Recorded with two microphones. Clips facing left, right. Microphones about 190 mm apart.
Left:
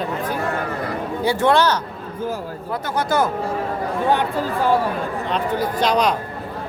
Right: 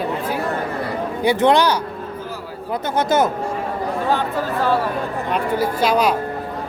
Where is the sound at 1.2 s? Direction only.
15° right (ahead or behind).